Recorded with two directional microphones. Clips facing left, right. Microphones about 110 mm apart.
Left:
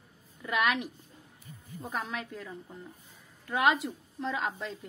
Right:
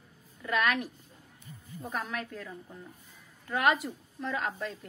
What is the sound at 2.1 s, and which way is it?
Speech, 20° left (ahead or behind).